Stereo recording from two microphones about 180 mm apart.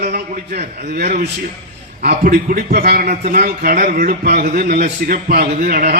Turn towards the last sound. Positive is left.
turn(degrees=-55)  # may be behind; listen again after turning